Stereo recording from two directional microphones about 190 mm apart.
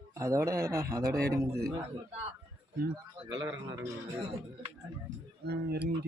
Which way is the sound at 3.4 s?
15° right (ahead or behind).